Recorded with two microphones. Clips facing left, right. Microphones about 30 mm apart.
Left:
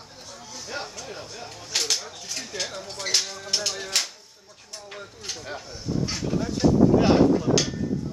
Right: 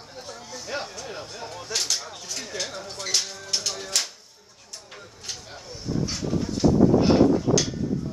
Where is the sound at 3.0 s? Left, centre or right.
Left.